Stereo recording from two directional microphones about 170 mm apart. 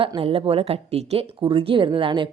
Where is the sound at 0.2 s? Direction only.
35° right (ahead or behind).